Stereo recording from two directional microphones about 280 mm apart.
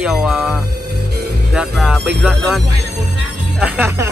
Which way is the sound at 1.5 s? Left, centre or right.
Centre.